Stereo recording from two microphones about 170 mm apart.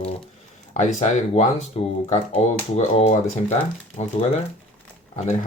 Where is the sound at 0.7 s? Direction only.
45° left (ahead or behind).